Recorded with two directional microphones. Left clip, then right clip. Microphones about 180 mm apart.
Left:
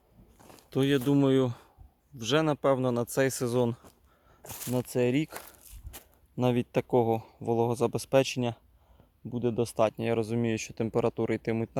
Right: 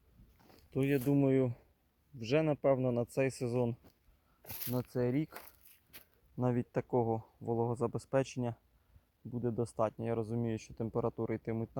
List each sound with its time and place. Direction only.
0.3 s a sound: 50° right (ahead or behind)
0.7 s speech: 15° left (ahead or behind)
4.4 s speech: 40° right (ahead or behind)
4.9 s speech: 15° left (ahead or behind)
5.9 s a sound: 40° right (ahead or behind)
6.3 s speech: 15° left (ahead or behind)